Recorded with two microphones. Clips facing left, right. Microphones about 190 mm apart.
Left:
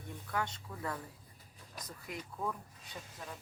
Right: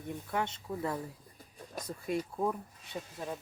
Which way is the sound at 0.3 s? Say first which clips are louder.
Right 3 dB; 25° right (ahead or behind).